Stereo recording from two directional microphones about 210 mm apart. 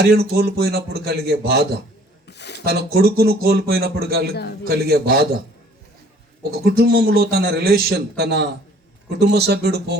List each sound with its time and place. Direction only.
0.0 s a man's voice: 50° right (ahead or behind)
2.2 s a sound: 55° left (ahead or behind)
2.6 s a man's voice: 50° right (ahead or behind)
6.5 s a man's voice: 45° right (ahead or behind)